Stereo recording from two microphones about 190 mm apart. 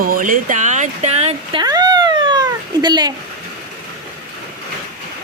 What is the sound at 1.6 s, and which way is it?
Cat, 20° right (ahead or behind).